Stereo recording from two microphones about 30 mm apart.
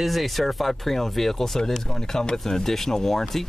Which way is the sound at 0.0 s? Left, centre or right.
Centre.